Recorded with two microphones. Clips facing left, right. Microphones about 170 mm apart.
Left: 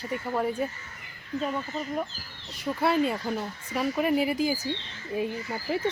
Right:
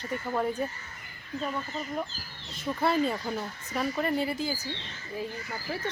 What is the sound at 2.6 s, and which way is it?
Speech, 5° left (ahead or behind).